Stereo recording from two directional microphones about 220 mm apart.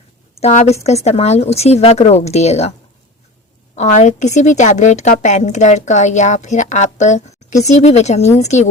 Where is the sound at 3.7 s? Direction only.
30° left (ahead or behind).